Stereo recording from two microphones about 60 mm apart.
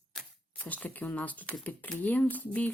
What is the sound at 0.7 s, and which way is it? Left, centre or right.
Speech, left.